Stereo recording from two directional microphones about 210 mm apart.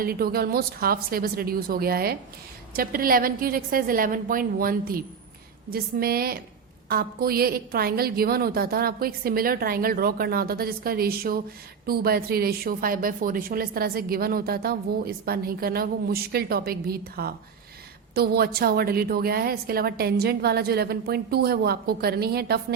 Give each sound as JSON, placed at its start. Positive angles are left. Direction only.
{"t": 0.0, "sound": "a woman's voice", "side_deg": -45}